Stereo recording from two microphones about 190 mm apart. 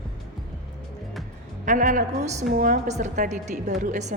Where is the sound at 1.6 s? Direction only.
40° right (ahead or behind).